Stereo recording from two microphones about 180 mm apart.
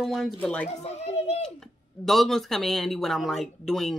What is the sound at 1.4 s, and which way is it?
Speech, centre (ahead or behind).